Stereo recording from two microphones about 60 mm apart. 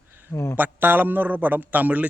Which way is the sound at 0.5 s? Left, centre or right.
Right.